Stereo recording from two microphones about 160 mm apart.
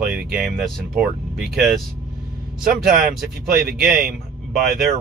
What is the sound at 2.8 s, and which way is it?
Speech, centre (ahead or behind).